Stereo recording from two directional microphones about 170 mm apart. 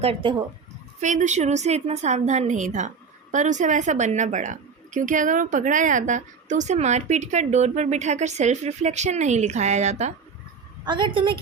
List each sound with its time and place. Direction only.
0.0 s speech: 35° right (ahead or behind)
1.0 s a woman's voice: 45° right (ahead or behind)
10.8 s a woman's voice: 30° right (ahead or behind)